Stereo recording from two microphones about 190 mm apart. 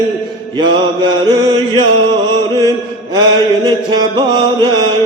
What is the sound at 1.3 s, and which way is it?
Music, 25° right (ahead or behind).